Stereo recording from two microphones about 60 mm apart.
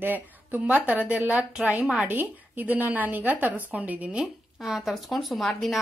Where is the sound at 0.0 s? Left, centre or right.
Right; by 1.7 s centre.